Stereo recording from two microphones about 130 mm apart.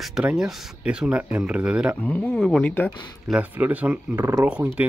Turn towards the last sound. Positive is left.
turn(degrees=-10)  # may be behind; listen again after turning